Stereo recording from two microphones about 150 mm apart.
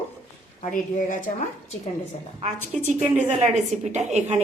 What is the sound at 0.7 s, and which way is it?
Speech, 65° left (ahead or behind).